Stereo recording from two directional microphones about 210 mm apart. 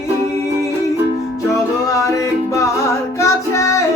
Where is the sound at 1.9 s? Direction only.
15° left (ahead or behind).